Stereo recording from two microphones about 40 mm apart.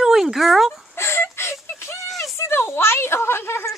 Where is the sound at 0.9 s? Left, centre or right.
Left.